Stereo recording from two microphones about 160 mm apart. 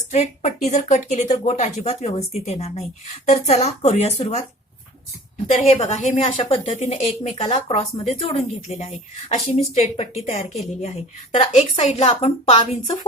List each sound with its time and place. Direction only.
0.1 s speech: 45° left (ahead or behind)
5.5 s speech: 40° left (ahead or behind)
6.3 s speech: 30° left (ahead or behind)
6.7 s speech: 45° left (ahead or behind)